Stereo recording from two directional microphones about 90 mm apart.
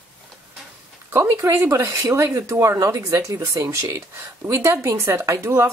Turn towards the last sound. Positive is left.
turn(degrees=-30)  # may be behind; listen again after turning